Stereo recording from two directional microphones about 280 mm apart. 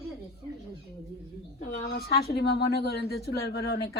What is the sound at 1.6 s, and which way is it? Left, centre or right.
A woman's voice, left.